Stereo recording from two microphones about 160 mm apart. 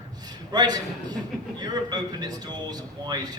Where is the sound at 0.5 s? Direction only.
25° right (ahead or behind).